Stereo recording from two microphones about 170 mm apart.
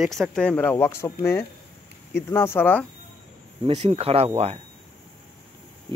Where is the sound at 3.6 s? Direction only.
35° right (ahead or behind).